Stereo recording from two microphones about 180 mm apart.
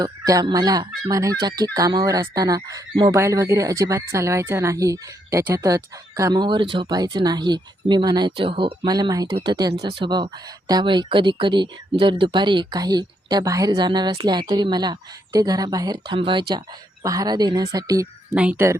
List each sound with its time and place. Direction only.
0.0 s speech: 20° right (ahead or behind)
18.3 s speech: 5° right (ahead or behind)